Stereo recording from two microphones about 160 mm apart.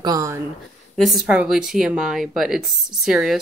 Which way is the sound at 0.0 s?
20° right (ahead or behind).